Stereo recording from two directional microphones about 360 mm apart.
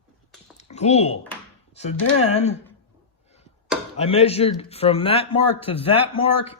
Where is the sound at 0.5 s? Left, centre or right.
Centre.